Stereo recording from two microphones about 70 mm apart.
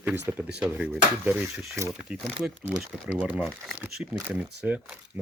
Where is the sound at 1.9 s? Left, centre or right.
Centre.